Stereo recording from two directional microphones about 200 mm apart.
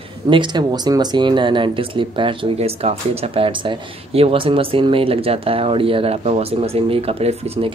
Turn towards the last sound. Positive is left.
turn(degrees=-30)  # may be behind; listen again after turning